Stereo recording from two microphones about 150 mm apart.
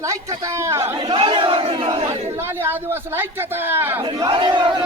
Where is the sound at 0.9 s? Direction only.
30° right (ahead or behind).